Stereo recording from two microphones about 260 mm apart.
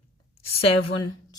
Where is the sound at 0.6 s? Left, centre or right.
Centre.